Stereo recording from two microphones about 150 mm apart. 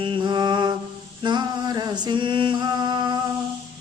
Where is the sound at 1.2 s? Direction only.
30° right (ahead or behind).